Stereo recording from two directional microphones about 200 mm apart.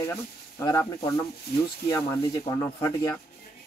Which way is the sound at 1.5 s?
50° left (ahead or behind).